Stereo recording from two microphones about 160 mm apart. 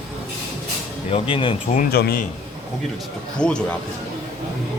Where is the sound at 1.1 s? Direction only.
35° left (ahead or behind).